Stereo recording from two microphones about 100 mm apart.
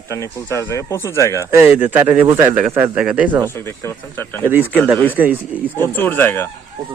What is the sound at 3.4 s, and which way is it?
Speech, 25° left (ahead or behind).